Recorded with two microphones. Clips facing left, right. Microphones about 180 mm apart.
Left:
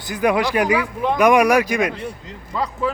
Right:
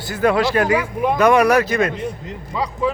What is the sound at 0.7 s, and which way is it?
Speech, 15° right (ahead or behind).